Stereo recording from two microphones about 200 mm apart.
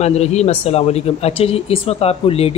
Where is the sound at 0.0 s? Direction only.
35° left (ahead or behind).